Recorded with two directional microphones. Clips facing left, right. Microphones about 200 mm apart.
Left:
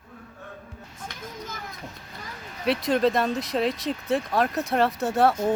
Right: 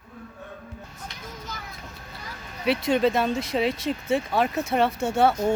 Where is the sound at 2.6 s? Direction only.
Centre (ahead or behind).